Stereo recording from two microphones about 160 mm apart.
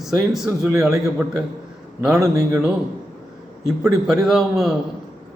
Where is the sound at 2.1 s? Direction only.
20° right (ahead or behind).